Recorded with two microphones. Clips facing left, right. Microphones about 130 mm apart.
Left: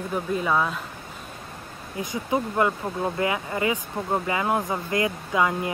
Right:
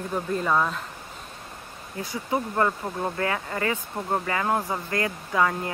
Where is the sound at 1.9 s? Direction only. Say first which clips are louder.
Left 2 dB; 20° left (ahead or behind).